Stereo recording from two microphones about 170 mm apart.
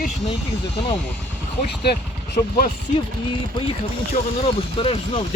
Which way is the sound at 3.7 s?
35° left (ahead or behind).